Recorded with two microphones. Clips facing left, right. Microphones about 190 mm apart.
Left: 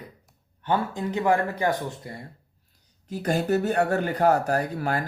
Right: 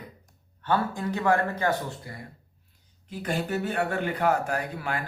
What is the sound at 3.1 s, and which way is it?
Speech, 40° left (ahead or behind).